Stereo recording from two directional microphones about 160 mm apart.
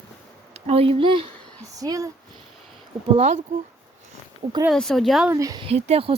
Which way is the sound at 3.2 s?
50° right (ahead or behind).